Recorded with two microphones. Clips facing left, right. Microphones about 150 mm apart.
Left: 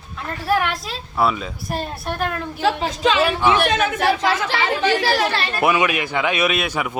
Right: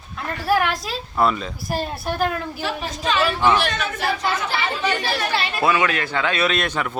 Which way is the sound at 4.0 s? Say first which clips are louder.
Left 4 dB; 90° left.